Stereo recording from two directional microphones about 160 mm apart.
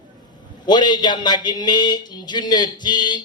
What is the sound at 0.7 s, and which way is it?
A man's voice, 25° left (ahead or behind).